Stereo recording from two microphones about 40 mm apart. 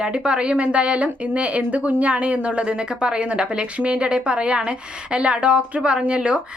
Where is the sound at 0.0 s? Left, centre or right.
Right.